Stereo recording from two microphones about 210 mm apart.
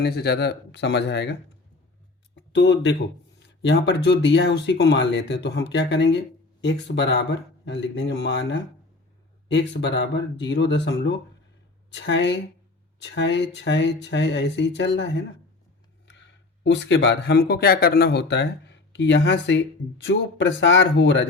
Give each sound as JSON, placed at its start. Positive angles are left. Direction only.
{"t": 0.0, "sound": "speech", "side_deg": 50}
{"t": 16.6, "sound": "speech", "side_deg": 55}